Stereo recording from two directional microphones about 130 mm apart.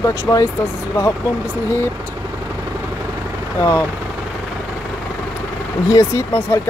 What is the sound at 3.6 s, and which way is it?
Speech, 20° left (ahead or behind).